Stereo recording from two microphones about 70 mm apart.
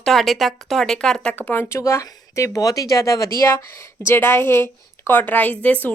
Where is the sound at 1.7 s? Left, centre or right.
Left.